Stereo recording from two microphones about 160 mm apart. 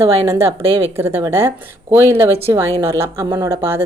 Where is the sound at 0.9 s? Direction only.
15° right (ahead or behind).